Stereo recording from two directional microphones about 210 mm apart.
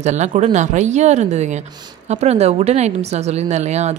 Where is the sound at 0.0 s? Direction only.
35° right (ahead or behind).